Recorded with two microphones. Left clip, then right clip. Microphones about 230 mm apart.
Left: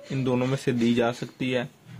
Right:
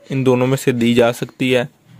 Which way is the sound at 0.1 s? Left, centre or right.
Right.